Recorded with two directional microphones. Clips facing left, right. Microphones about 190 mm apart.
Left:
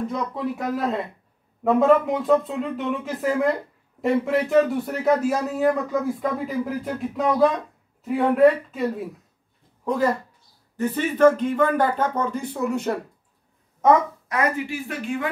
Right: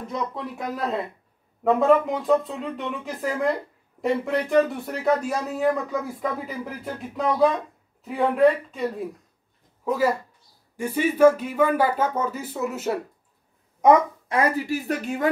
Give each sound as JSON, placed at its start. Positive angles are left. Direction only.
{"t": 0.0, "sound": "speech", "side_deg": 0}
{"t": 14.3, "sound": "speech", "side_deg": -35}